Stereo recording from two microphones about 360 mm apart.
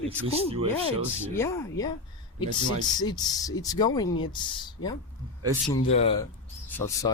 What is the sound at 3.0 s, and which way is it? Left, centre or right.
Speech, centre.